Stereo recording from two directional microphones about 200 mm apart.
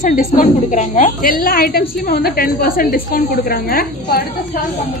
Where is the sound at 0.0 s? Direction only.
45° left (ahead or behind).